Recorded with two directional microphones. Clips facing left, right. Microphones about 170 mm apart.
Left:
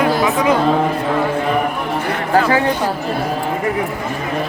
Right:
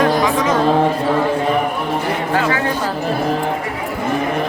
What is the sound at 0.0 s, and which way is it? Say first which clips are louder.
Chatter: even; 5° left (ahead or behind).